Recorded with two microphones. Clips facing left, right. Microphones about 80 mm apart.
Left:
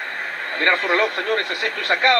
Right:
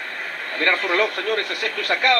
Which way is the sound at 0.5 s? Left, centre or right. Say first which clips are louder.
Left 2 dB; left.